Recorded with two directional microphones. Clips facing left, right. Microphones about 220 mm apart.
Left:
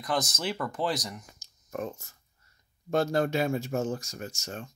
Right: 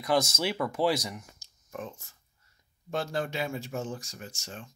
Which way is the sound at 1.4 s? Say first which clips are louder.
Left 7 dB; 40° left (ahead or behind).